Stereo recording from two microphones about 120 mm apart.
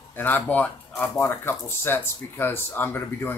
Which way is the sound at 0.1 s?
15° left (ahead or behind).